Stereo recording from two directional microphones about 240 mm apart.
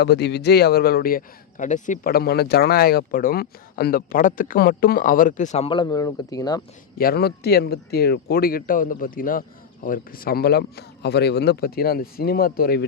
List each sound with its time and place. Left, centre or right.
0.0 s speech: left; by 6.6 s centre
7.0 s speech: left